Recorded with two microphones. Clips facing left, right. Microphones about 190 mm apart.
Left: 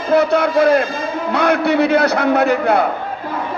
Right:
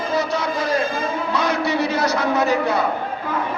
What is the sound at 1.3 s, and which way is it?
A man's voice, 60° left (ahead or behind).